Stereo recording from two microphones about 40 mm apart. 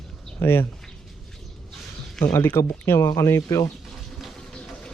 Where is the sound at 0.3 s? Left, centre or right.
Left.